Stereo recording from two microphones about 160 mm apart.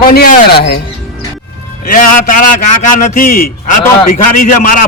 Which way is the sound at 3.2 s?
65° left (ahead or behind).